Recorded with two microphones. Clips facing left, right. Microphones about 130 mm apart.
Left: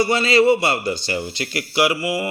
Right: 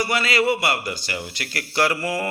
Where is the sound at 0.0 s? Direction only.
25° left (ahead or behind).